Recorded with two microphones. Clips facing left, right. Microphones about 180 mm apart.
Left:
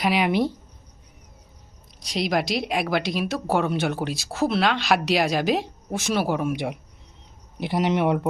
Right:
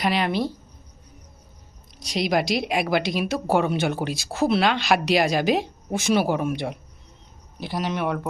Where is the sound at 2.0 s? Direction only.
Centre (ahead or behind).